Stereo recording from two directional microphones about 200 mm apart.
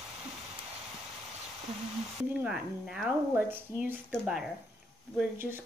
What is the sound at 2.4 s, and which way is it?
Speech, 5° right (ahead or behind).